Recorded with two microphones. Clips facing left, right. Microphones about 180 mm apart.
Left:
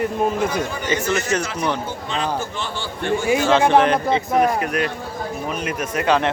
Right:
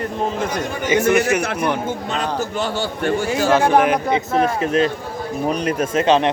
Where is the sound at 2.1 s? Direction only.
45° right (ahead or behind).